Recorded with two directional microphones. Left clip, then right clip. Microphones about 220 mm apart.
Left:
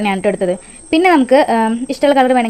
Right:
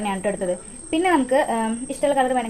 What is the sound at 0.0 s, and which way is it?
Speech, 45° left (ahead or behind).